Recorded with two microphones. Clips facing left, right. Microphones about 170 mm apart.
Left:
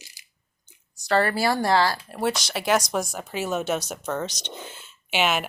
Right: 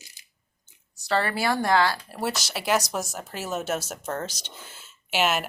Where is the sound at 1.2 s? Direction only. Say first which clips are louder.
Left 3 dB; 40° left (ahead or behind).